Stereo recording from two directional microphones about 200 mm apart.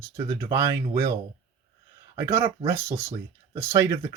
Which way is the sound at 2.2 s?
15° right (ahead or behind).